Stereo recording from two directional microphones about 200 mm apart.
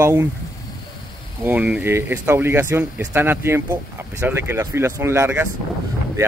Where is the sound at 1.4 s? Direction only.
10° right (ahead or behind).